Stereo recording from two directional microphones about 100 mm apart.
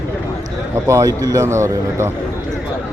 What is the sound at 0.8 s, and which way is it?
Speech, 30° right (ahead or behind).